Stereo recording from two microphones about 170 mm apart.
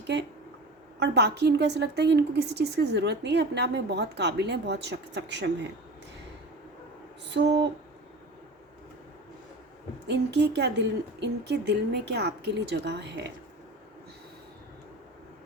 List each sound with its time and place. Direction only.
0.9 s a woman's voice: 80° right
7.3 s a sound: 90° right
10.1 s a woman's voice: 90° right